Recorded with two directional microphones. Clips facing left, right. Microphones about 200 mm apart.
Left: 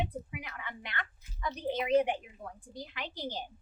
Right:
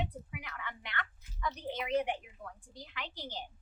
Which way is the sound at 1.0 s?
30° left (ahead or behind).